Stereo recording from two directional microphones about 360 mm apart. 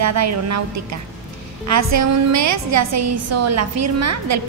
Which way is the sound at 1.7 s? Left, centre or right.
Right.